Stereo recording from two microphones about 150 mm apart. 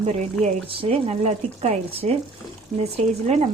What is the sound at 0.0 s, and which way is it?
Speech, 45° right (ahead or behind).